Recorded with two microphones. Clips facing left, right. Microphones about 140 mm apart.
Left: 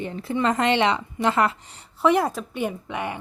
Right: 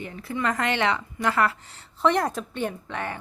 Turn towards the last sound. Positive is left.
turn(degrees=15)  # may be behind; listen again after turning